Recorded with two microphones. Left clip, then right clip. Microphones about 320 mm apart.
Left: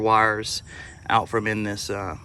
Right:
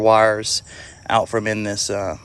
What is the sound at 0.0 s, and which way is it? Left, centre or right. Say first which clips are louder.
Speech: right 5 dB; centre.